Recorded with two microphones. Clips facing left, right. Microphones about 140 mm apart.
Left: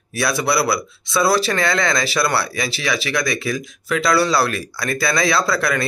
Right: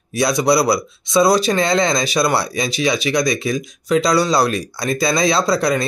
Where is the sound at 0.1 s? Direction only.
20° right (ahead or behind).